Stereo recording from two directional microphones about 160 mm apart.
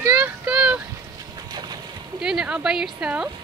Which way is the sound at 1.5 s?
25° right (ahead or behind).